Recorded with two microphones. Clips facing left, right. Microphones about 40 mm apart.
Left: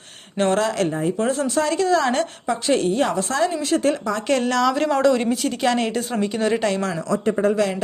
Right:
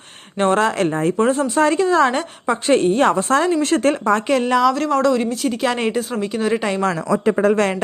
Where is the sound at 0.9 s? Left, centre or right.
Right.